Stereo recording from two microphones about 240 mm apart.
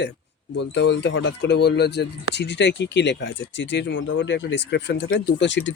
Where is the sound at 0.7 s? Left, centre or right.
Left.